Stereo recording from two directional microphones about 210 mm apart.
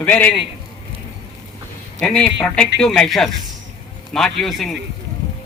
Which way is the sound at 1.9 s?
5° left (ahead or behind).